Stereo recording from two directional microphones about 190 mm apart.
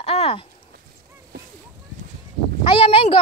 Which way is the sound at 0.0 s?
30° left (ahead or behind).